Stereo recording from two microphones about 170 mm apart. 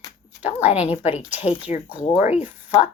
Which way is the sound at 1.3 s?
40° left (ahead or behind).